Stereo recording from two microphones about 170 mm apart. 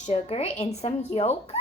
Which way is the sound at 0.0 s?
40° left (ahead or behind).